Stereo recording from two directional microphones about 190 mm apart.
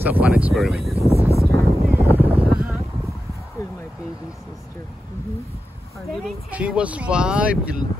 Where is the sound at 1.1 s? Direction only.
30° right (ahead or behind).